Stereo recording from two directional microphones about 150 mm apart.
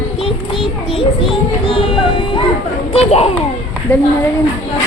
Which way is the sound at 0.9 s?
35° left (ahead or behind).